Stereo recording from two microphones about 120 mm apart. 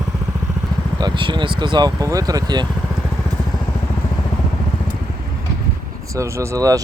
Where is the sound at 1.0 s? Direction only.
40° right (ahead or behind).